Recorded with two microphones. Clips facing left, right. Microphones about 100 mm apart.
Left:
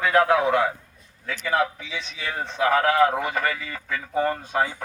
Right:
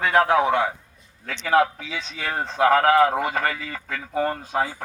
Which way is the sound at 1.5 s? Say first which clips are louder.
Right 4 dB; 60° right (ahead or behind).